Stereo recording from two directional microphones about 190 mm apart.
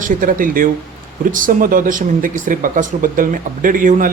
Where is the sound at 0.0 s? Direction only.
45° right (ahead or behind).